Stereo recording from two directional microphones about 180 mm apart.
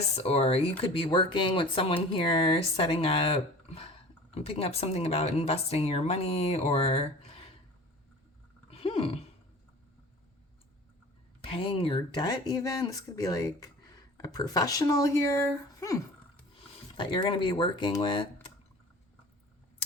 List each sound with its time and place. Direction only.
0.2 s speech: 35° left (ahead or behind)
8.7 s a sound: 30° left (ahead or behind)
11.4 s speech: 30° left (ahead or behind)